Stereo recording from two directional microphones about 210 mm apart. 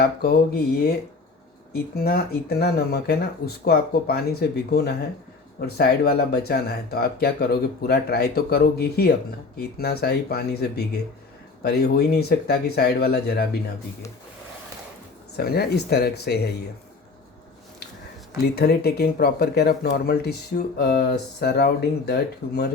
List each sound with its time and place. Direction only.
0.0 s speech: 50° left (ahead or behind)
15.4 s speech: 50° left (ahead or behind)
18.5 s speech: 50° left (ahead or behind)